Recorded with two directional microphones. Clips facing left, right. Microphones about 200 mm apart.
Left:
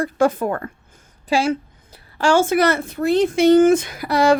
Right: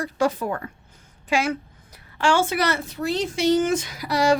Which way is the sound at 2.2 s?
40° left (ahead or behind).